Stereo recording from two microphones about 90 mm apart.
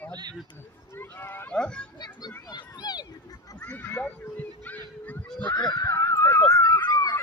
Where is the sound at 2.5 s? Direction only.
50° left (ahead or behind).